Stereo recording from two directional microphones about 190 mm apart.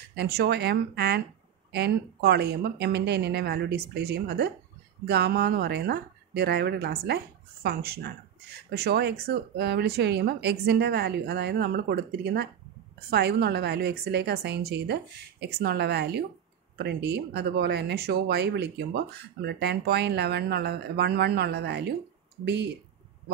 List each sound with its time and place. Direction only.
0.1 s speech: 60° right (ahead or behind)